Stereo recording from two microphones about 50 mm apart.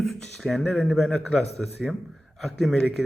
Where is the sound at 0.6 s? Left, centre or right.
Left.